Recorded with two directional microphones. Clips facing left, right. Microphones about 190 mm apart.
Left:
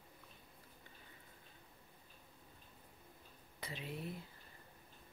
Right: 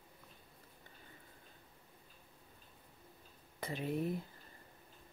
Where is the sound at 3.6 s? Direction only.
50° right (ahead or behind).